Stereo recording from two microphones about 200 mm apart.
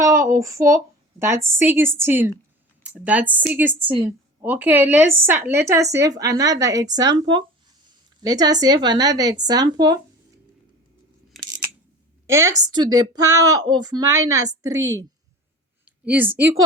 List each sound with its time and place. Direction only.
0.3 s speech: 15° right (ahead or behind)
11.3 s scissors: centre (ahead or behind)
12.3 s speech: 15° right (ahead or behind)
16.0 s speech: 10° right (ahead or behind)